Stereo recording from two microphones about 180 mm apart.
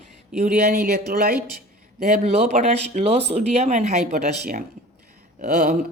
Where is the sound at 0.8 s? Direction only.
60° right (ahead or behind).